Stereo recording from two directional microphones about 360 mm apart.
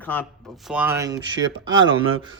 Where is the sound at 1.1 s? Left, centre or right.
Right.